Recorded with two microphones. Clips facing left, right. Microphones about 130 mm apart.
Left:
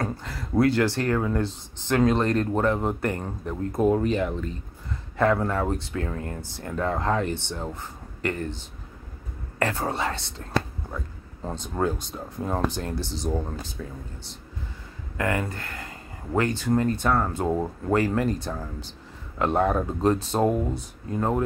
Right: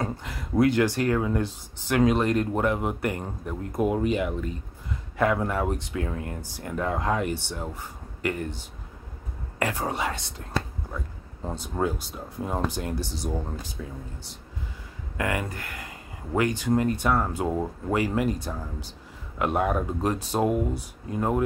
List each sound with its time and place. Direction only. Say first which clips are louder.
0.0 s speech: left 1 dB; 15° right (ahead or behind)
11.4 s speech: left 1 dB; 10° right (ahead or behind)
15.1 s speech: left 2 dB; 15° right (ahead or behind)
17.5 s speech: left 2 dB; 10° left (ahead or behind)
17.9 s speech: left 2 dB; 10° right (ahead or behind)